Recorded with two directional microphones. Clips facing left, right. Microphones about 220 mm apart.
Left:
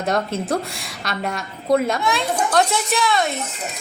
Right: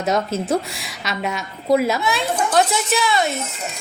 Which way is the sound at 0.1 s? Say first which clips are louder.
Right 2 dB; centre (ahead or behind).